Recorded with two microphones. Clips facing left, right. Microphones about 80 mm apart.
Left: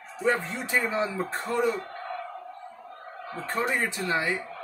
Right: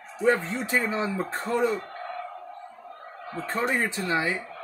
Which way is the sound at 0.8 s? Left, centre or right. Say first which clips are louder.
Even; right.